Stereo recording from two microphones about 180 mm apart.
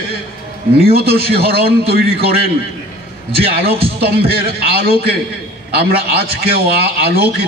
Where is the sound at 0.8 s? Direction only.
60° right (ahead or behind).